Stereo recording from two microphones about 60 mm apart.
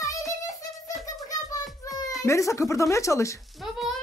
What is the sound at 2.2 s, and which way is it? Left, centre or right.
Speech, left.